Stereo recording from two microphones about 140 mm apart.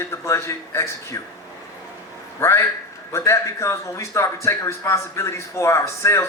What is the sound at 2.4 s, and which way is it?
A man's voice, 20° left (ahead or behind).